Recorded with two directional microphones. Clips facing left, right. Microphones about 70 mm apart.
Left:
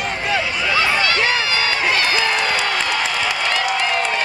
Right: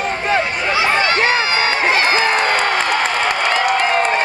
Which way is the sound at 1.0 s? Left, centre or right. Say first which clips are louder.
Right 3 dB; right.